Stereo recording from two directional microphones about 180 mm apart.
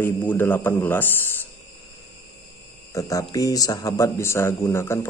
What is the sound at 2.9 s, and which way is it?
A man's voice, 20° left (ahead or behind).